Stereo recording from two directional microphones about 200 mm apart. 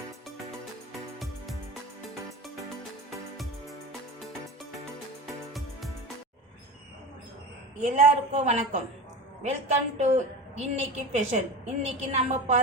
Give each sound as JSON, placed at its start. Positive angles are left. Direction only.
{"t": 7.8, "sound": "a woman's voice", "side_deg": -30}